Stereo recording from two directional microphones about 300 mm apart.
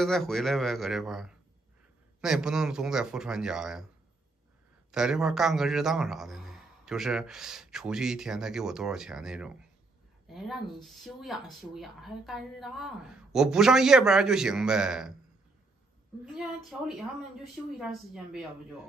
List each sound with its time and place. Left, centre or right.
0.0 s speech: centre
4.9 s speech: centre
16.3 s speech: centre